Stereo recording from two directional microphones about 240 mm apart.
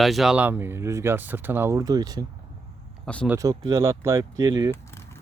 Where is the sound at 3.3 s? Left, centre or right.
Centre.